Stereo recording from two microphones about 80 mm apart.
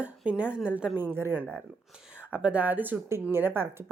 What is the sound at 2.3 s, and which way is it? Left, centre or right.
A woman's voice, centre.